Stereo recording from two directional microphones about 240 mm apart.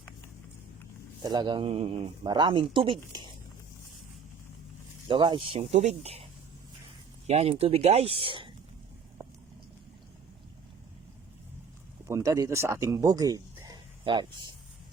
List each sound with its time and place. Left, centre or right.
1.2 s speech: centre
5.0 s speech: centre
7.3 s speech: right
12.0 s speech: centre